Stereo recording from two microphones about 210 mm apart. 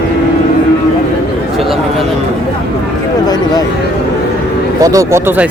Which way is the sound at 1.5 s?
Centre (ahead or behind).